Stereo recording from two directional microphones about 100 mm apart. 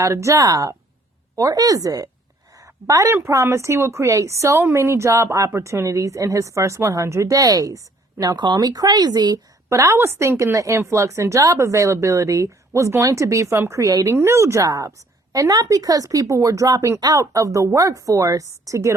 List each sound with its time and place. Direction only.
0.0 s a woman's voice: 30° right (ahead or behind)
8.2 s speech: 45° right (ahead or behind)
9.6 s a woman's voice: 25° right (ahead or behind)